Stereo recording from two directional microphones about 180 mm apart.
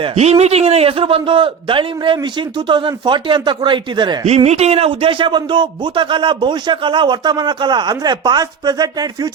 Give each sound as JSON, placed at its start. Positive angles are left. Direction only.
{"t": 0.0, "sound": "a man's voice", "side_deg": -35}